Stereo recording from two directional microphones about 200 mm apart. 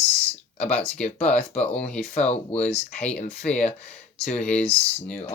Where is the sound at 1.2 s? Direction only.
5° left (ahead or behind).